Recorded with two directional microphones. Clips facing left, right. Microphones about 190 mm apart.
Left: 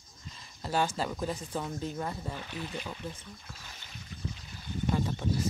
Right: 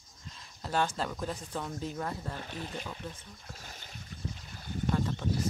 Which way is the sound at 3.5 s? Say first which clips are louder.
Right 2 dB; 45° right (ahead or behind).